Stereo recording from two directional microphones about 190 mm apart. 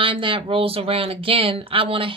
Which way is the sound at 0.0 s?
25° right (ahead or behind).